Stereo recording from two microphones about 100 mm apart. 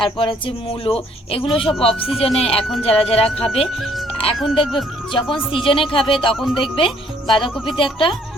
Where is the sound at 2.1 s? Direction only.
75° left (ahead or behind).